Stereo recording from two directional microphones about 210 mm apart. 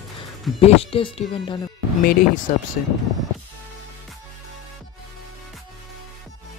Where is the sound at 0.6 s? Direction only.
25° left (ahead or behind).